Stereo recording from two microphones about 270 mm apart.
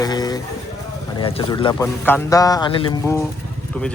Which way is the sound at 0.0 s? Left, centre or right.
Centre.